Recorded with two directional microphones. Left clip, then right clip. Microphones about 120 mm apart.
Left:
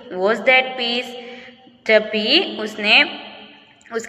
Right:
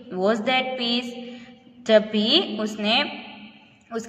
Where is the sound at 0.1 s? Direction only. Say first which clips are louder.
Left 4 dB; 40° right (ahead or behind).